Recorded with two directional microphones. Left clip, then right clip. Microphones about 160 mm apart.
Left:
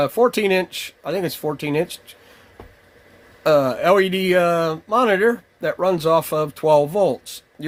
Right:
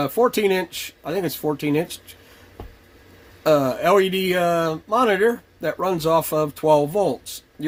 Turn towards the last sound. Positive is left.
turn(degrees=40)  # may be behind; listen again after turning